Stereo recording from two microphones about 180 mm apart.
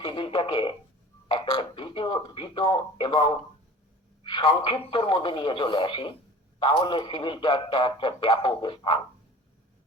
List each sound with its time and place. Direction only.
0.0 s a man's voice: 25° left (ahead or behind)